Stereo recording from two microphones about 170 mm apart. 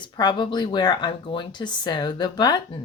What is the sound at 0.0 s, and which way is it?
Speech, 25° left (ahead or behind).